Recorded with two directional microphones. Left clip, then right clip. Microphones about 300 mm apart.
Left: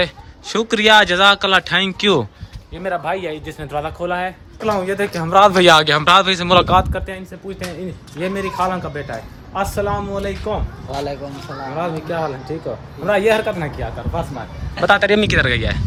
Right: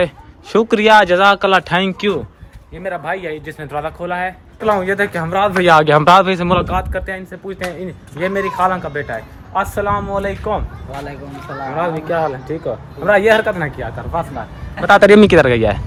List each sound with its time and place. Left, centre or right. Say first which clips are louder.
0.0 s a man's voice: right 2 dB; centre
5.3 s speech: left 6 dB; centre
5.6 s a man's voice: right 2 dB; centre
11.7 s a man's voice: right 5 dB; centre